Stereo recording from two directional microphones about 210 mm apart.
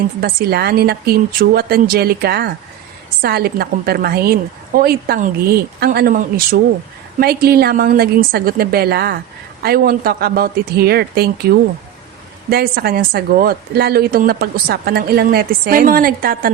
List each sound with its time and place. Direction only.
0.2 s a woman's voice: 50° right (ahead or behind)